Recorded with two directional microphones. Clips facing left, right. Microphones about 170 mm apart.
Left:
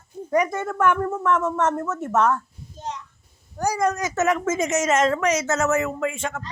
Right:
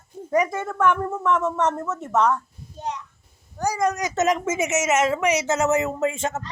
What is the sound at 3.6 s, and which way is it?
Speech, 10° left (ahead or behind).